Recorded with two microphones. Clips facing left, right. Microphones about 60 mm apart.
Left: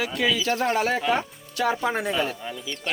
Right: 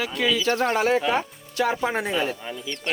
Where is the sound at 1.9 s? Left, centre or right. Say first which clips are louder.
Right 1 dB; right.